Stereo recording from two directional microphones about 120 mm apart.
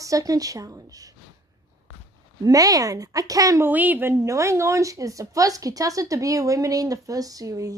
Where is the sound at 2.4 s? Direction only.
30° right (ahead or behind).